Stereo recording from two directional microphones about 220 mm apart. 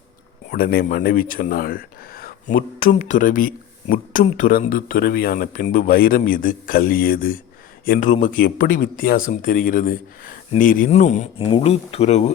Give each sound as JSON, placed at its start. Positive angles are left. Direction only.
{"t": 0.5, "sound": "speech", "side_deg": 45}